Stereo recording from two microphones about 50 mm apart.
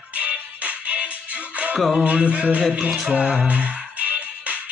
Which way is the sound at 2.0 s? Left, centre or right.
Right.